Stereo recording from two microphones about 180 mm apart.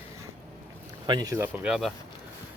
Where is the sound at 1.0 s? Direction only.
20° right (ahead or behind); by 1.9 s 5° right (ahead or behind).